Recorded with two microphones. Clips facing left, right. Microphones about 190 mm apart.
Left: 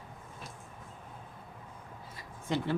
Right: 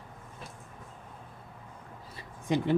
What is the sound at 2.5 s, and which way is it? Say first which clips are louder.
Speech: right 4 dB; 15° right (ahead or behind).